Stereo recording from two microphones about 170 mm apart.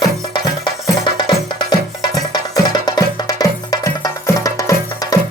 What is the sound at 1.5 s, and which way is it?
Music, 25° left (ahead or behind).